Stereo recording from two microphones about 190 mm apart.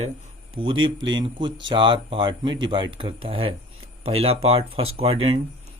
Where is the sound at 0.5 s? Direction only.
25° right (ahead or behind).